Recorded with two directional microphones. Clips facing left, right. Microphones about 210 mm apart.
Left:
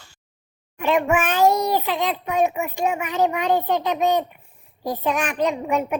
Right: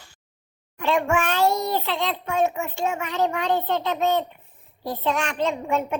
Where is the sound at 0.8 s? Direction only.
20° left (ahead or behind).